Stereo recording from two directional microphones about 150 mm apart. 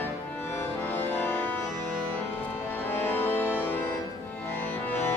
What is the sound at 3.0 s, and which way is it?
Music, 15° left (ahead or behind).